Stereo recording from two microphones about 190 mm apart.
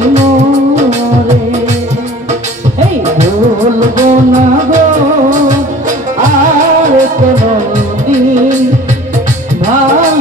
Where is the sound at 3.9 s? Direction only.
40° right (ahead or behind).